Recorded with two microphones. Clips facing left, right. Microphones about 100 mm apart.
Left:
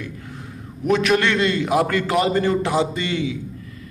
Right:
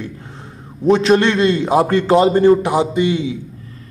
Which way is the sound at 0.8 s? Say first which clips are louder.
Right 5 dB; 25° right (ahead or behind).